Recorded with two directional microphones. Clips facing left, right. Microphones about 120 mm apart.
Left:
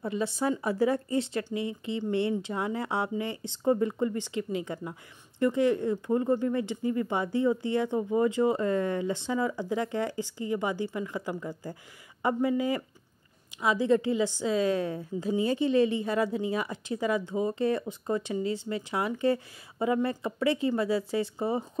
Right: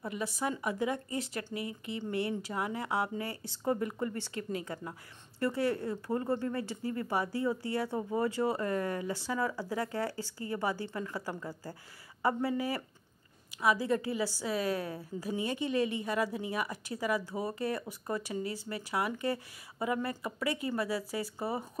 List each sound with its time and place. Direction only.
0.0 s speech: 25° left (ahead or behind)